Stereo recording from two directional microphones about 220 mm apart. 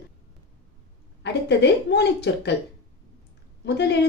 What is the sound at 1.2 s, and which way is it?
A woman's voice, 50° left (ahead or behind).